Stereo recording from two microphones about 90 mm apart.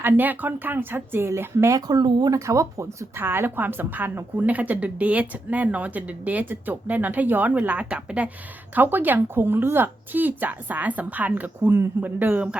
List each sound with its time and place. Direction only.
0.0 s speech: 20° right (ahead or behind)
1.9 s speech: 55° right (ahead or behind)
2.3 s speech: 35° right (ahead or behind)
3.2 s a woman's voice: 25° right (ahead or behind)